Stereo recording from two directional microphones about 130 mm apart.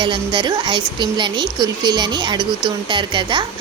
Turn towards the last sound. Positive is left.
turn(degrees=-40)  # may be behind; listen again after turning